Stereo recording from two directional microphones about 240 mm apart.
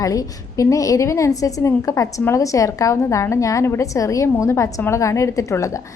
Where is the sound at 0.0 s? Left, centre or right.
Centre.